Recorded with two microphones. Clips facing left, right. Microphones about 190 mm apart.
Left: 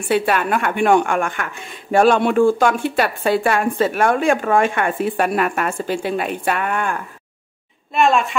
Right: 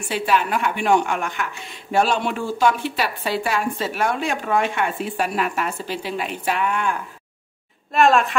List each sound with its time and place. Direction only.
0.1 s speech: 55° left (ahead or behind)
7.9 s a woman's voice: centre (ahead or behind)